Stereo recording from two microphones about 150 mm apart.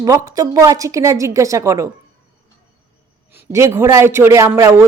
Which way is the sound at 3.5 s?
20° right (ahead or behind).